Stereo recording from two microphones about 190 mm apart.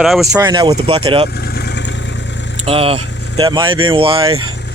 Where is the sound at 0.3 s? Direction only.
25° right (ahead or behind).